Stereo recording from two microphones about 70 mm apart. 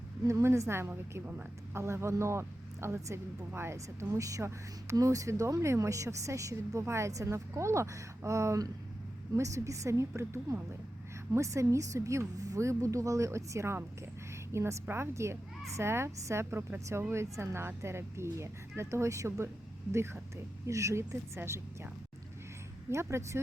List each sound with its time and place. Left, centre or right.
0.3 s a woman's voice: right
20.7 s a woman's voice: right
22.9 s speech: right